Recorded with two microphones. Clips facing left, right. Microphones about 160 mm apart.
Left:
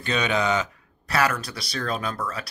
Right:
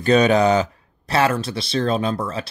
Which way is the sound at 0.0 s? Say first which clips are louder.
Right 9 dB; 40° right (ahead or behind).